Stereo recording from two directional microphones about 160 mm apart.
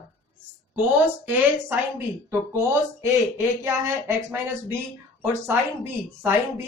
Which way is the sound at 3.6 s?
15° right (ahead or behind).